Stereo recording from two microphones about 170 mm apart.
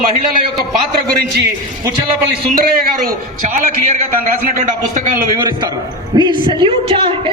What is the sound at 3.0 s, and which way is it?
Speech, 50° right (ahead or behind).